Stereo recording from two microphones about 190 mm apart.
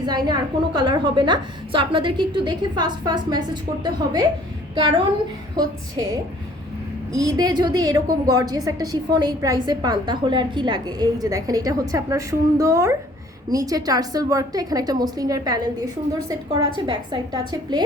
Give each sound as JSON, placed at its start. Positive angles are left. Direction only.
{"t": 0.0, "sound": "a woman's voice", "side_deg": -20}